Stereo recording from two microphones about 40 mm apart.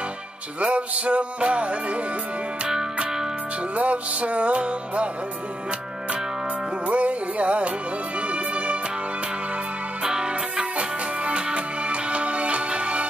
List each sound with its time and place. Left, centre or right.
0.6 s music: right
3.7 s music: right
6.9 s music: right
10.0 s music: centre